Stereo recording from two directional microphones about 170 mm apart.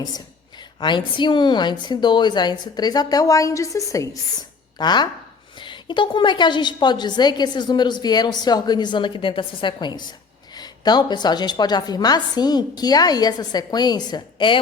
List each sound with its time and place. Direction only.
0.0 s a woman's voice: 25° left (ahead or behind)